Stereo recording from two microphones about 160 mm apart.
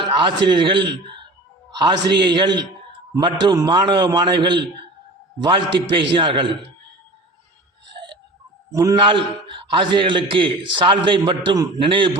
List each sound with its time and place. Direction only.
0.2 s a man's voice: 30° right (ahead or behind)
8.7 s a man's voice: 20° right (ahead or behind)